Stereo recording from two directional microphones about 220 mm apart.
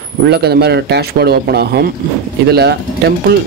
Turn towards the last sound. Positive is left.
turn(degrees=-45)  # may be behind; listen again after turning